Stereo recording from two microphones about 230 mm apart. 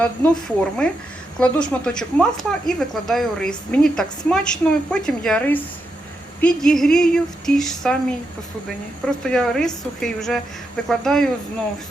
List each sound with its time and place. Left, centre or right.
0.0 s speech: centre
9.0 s speech: centre